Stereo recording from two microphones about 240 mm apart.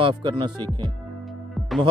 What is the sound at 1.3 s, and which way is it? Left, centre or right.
Music, centre.